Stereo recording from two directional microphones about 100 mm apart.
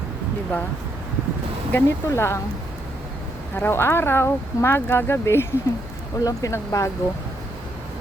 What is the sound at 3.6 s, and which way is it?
Speech, 25° left (ahead or behind).